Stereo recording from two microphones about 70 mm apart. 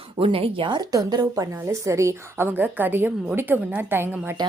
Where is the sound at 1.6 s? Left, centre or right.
Right.